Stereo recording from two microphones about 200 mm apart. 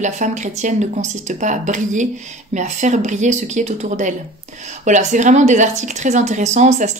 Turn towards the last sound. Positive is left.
turn(degrees=-35)  # may be behind; listen again after turning